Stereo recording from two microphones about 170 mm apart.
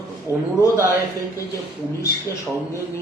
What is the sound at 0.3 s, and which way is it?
Speech, 15° right (ahead or behind).